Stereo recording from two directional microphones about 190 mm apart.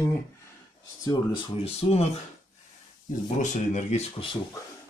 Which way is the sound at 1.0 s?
30° left (ahead or behind).